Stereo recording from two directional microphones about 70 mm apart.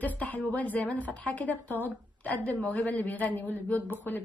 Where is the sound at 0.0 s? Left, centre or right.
Left.